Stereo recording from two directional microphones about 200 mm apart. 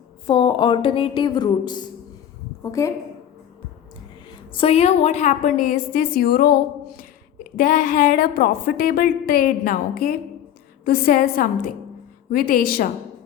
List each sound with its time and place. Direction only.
0.3 s a woman's voice: 25° left (ahead or behind)
4.3 s a woman's voice: 25° left (ahead or behind); by 12.9 s 45° left (ahead or behind)